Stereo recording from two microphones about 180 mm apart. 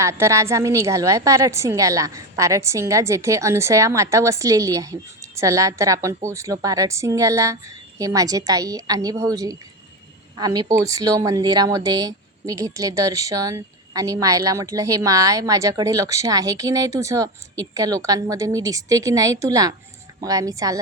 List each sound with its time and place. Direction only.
0.0 s a woman's voice: 15° right (ahead or behind)